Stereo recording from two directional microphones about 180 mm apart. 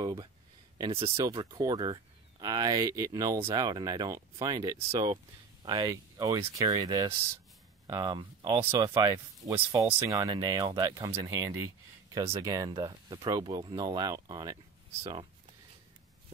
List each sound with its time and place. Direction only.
0.0 s a sound: 25° right (ahead or behind)
0.7 s speech: 30° right (ahead or behind)
1.1 s speech: 20° right (ahead or behind)